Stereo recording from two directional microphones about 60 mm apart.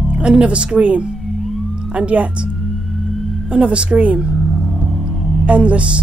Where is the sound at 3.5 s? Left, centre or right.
Centre.